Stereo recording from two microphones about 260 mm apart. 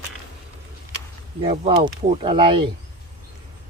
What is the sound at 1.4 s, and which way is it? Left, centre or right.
Speech, right.